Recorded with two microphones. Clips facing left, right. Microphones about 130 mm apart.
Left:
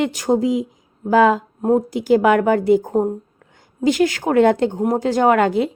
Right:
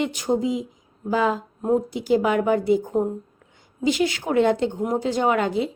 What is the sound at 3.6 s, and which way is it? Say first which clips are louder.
A woman's voice: left 5 dB; 50° left (ahead or behind).